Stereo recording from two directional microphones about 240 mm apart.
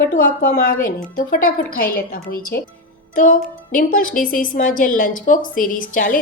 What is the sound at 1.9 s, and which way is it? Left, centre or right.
Speech, left.